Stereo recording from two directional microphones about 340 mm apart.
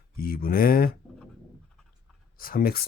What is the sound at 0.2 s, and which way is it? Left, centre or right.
Speech, left.